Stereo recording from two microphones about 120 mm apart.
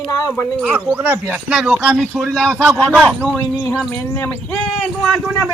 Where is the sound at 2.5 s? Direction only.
20° right (ahead or behind).